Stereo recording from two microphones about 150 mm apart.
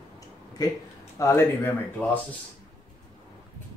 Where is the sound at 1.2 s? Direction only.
15° left (ahead or behind).